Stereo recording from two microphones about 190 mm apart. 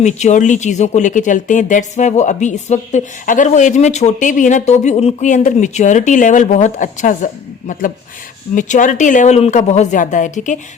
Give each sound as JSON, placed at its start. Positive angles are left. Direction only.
{"t": 0.0, "sound": "speech", "side_deg": 40}